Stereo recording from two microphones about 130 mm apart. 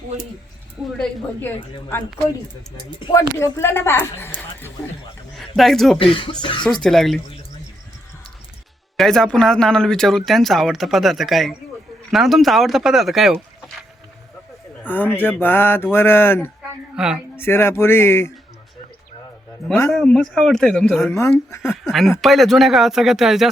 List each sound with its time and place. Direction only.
3.3 s a woman's voice: 20° left (ahead or behind)
5.4 s speech: centre (ahead or behind)
6.0 s speech: 45° left (ahead or behind)
6.8 s speech: centre (ahead or behind)
9.0 s speech: 5° left (ahead or behind)
14.8 s speech: 15° left (ahead or behind)
16.9 s speech: 5° right (ahead or behind)
17.3 s a woman's voice: 15° left (ahead or behind)
19.9 s speech: 5° left (ahead or behind)
21.0 s a woman's voice: 20° left (ahead or behind)
21.6 s speech: centre (ahead or behind)